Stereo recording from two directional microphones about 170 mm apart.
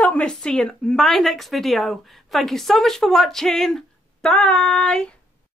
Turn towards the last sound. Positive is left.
turn(degrees=5)  # may be behind; listen again after turning